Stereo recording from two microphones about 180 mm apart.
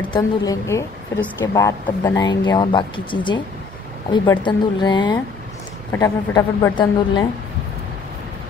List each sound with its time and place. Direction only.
0.1 s a woman's voice: 20° left (ahead or behind)